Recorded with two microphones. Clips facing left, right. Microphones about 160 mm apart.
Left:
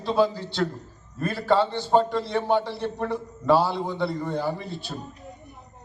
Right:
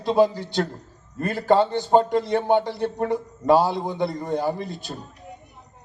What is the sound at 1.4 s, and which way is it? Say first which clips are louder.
Speech: right 3 dB; 50° right (ahead or behind).